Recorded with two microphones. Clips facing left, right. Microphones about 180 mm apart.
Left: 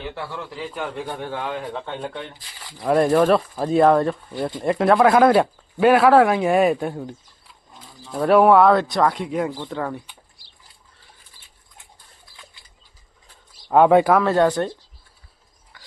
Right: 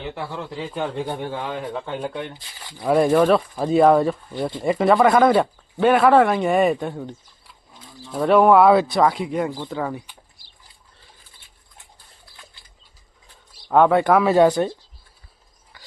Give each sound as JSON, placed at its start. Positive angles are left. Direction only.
{"t": 0.0, "sound": "a man's voice", "side_deg": -20}
{"t": 13.7, "sound": "speech", "side_deg": 10}
{"t": 14.1, "sound": "speech", "side_deg": -10}
{"t": 15.7, "sound": "a sound", "side_deg": -5}